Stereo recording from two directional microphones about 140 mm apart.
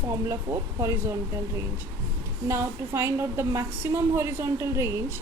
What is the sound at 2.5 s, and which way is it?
A woman's voice, 20° right (ahead or behind).